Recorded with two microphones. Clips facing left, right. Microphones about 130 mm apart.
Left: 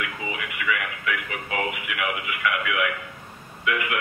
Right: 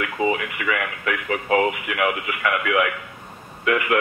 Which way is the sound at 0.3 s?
45° right (ahead or behind).